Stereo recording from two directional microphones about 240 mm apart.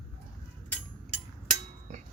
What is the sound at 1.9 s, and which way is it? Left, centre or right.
Music, right.